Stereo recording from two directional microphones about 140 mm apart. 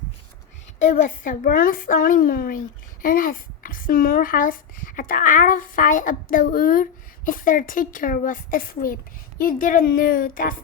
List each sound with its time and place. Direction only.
0.8 s a woman's voice: 70° left (ahead or behind); by 10.5 s 90° left